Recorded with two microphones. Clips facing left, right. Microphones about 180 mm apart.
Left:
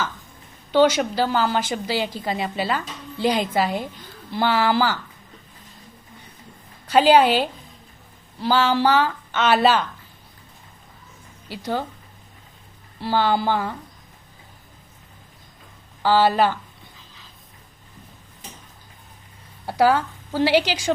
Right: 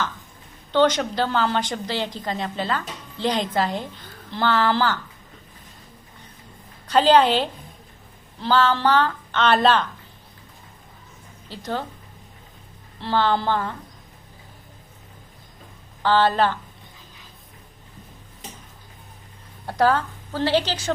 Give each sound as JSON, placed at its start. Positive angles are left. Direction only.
{"t": 0.7, "sound": "a woman's voice", "side_deg": 10}
{"t": 6.8, "sound": "a woman's voice", "side_deg": 10}
{"t": 11.4, "sound": "a woman's voice", "side_deg": 10}
{"t": 13.0, "sound": "a woman's voice", "side_deg": 10}
{"t": 16.0, "sound": "a woman's voice", "side_deg": 10}
{"t": 19.6, "sound": "a woman's voice", "side_deg": 10}